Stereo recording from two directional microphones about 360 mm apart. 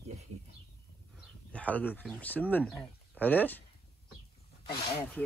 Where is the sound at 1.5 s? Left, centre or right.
Centre.